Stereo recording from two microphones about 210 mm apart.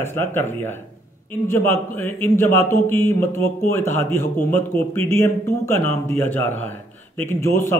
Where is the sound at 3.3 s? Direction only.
75° right (ahead or behind).